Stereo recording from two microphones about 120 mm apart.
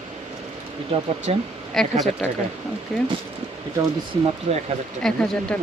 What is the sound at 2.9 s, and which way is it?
Speech, 5° left (ahead or behind).